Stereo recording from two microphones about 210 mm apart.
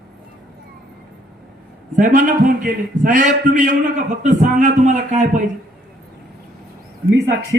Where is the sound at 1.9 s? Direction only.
40° right (ahead or behind).